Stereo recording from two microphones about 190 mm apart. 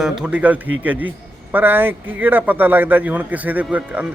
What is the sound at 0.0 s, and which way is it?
A man's voice, 5° right (ahead or behind).